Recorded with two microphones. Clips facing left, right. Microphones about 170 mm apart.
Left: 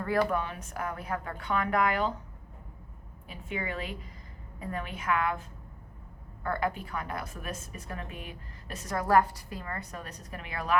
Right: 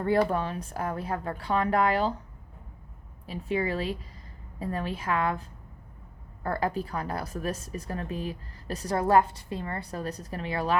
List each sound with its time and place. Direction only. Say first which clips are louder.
0.0 s a woman's voice: right 3 dB; 30° right (ahead or behind)
3.2 s a woman's voice: right 7 dB; 35° right (ahead or behind)